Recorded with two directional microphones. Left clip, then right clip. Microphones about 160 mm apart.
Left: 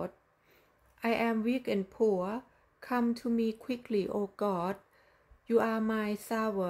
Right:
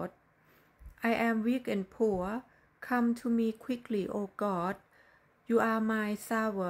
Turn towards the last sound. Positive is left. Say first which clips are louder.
# even
turn(degrees=5)  # may be behind; listen again after turning